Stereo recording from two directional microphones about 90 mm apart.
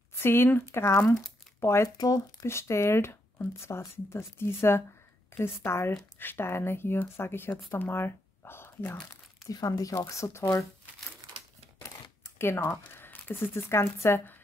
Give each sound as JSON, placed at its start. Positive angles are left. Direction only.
{"t": 0.2, "sound": "speech", "side_deg": 25}
{"t": 9.1, "sound": "speech", "side_deg": 40}
{"t": 12.2, "sound": "speech", "side_deg": 30}